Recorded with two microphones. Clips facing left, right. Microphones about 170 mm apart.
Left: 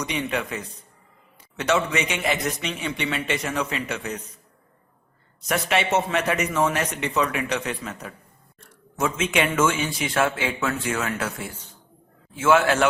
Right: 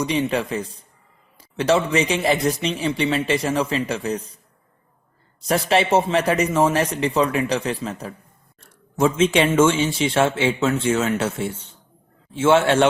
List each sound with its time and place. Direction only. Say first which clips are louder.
0.0 s a man's voice: right 6 dB; 30° right (ahead or behind)
5.5 s a man's voice: right 5 dB; 30° right (ahead or behind)